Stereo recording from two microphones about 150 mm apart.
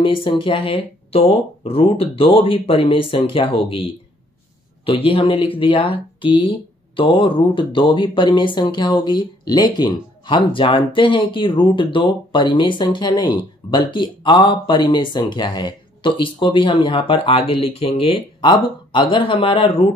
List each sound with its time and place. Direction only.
0.0 s speech: 35° left (ahead or behind)
4.8 s speech: 35° left (ahead or behind)